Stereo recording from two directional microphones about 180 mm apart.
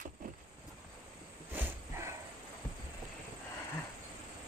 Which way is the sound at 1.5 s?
15° right (ahead or behind).